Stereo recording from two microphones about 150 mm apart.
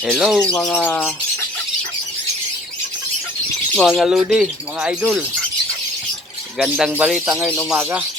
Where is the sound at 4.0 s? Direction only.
5° right (ahead or behind).